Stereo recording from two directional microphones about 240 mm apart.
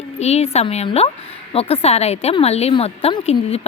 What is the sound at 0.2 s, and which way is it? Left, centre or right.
A woman's voice, left.